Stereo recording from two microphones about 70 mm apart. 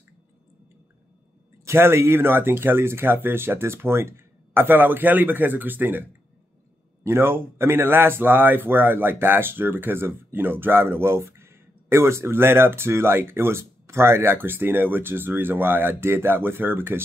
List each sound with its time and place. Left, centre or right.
1.6 s a man's voice: right
7.0 s speech: right